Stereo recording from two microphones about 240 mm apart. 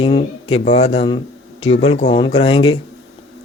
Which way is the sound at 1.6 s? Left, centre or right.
Left.